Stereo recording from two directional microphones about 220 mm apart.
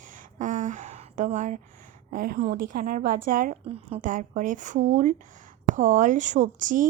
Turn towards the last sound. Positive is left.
turn(degrees=-35)  # may be behind; listen again after turning